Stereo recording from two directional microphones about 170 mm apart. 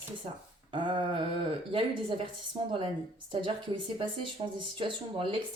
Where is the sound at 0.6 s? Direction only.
30° right (ahead or behind).